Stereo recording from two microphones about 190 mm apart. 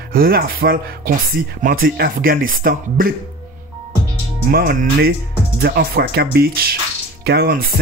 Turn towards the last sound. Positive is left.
turn(degrees=-55)  # may be behind; listen again after turning